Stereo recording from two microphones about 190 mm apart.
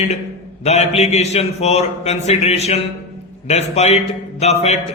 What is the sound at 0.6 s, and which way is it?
A man's voice, 35° left (ahead or behind).